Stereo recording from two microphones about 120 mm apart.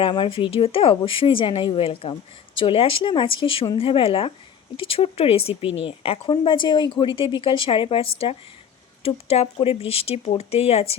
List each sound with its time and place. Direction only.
0.0 s speech: 45° left (ahead or behind)